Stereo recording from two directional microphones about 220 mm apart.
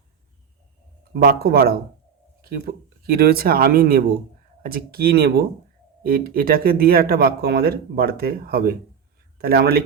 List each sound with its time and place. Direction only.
1.1 s speech: 45° right (ahead or behind)